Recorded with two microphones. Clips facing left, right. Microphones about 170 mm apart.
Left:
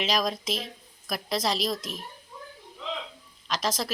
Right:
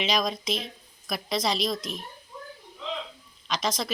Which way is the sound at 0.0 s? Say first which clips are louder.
Even; centre (ahead or behind).